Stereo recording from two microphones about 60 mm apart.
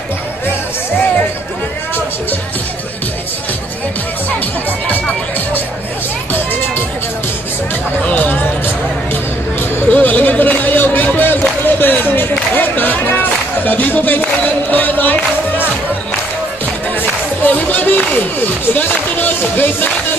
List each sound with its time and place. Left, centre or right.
8.0 s music: left
9.8 s a sound: left
11.8 s music: left
17.4 s speech: left